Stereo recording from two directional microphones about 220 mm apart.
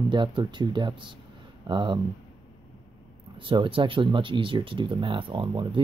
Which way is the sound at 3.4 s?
20° right (ahead or behind).